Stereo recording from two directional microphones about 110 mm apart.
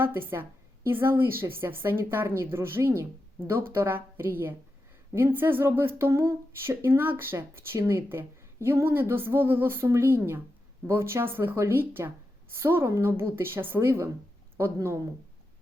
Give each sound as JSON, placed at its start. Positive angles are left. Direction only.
{"t": 0.0, "sound": "speech", "side_deg": -20}